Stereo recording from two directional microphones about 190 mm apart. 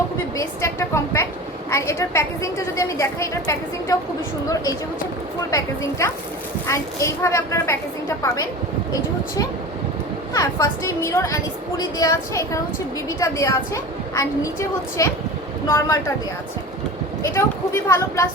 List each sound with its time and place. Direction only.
0.3 s a woman's voice: 15° left (ahead or behind)
5.5 s a woman's voice: 15° left (ahead or behind)
10.3 s a woman's voice: 15° left (ahead or behind)
15.7 s a woman's voice: 15° left (ahead or behind)
17.3 s a woman's voice: 15° left (ahead or behind)